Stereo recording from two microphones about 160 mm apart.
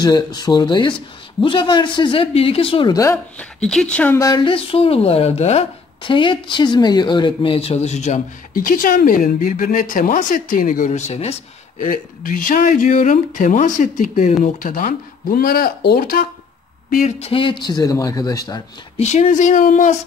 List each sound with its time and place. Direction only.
0.0 s speech: 25° left (ahead or behind)
3.6 s speech: 5° left (ahead or behind); by 11.4 s 40° left (ahead or behind)
11.8 s speech: 60° left (ahead or behind)
17.2 s speech: 35° left (ahead or behind)
18.9 s speech: 45° left (ahead or behind)